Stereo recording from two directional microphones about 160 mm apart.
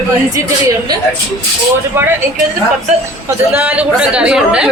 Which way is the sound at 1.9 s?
10° right (ahead or behind).